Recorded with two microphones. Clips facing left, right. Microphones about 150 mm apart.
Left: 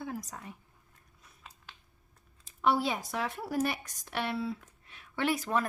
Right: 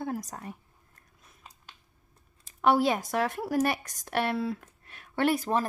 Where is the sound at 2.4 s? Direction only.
80° right.